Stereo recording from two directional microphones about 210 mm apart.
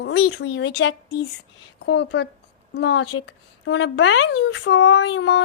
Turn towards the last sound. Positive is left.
turn(degrees=65)  # may be behind; listen again after turning